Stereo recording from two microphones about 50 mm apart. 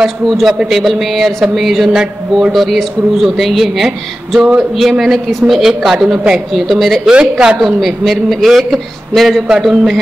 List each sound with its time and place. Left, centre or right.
0.0 s speech: centre
4.4 s speech: right
4.7 s a woman's voice: centre
7.1 s a woman's voice: centre
7.8 s a woman's voice: centre